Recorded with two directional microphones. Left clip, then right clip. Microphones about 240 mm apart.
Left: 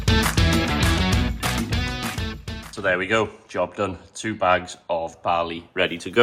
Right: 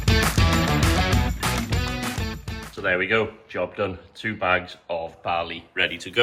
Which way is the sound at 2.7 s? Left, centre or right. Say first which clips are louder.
Left 1 dB; centre.